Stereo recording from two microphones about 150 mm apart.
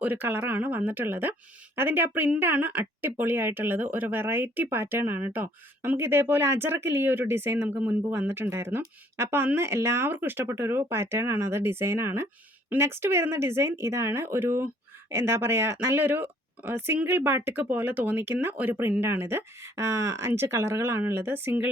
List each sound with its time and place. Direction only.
0.0 s speech: 10° right (ahead or behind)